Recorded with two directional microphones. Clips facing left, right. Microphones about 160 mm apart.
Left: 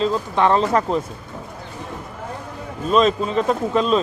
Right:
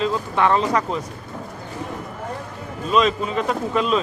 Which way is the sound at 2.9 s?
35° left (ahead or behind).